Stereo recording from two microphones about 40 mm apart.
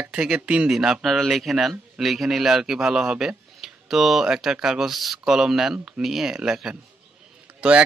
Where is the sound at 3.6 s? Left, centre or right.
Centre.